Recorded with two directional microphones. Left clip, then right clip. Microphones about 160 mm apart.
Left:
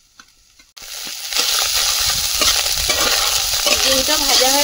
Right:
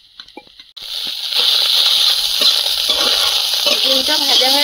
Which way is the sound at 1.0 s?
10° left (ahead or behind).